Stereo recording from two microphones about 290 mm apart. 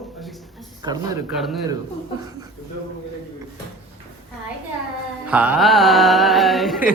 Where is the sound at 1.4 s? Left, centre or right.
Centre.